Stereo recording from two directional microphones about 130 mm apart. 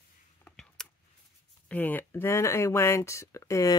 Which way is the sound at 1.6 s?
15° left (ahead or behind).